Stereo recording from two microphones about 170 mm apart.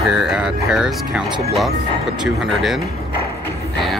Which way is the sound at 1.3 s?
35° right (ahead or behind).